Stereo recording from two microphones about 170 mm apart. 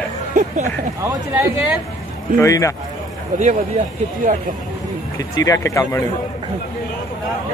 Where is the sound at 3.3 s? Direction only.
50° right (ahead or behind).